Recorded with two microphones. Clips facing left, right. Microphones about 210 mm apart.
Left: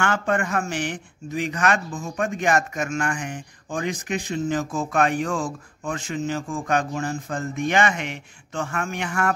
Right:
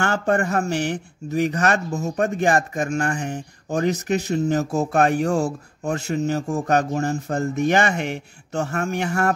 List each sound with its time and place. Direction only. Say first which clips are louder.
0.0 s speech: right 3 dB; 40° right (ahead or behind)